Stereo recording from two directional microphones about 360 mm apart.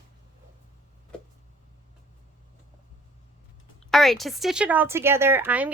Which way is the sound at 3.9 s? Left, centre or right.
Centre.